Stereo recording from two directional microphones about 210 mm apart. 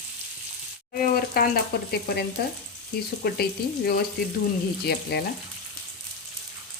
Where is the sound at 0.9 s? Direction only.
45° left (ahead or behind).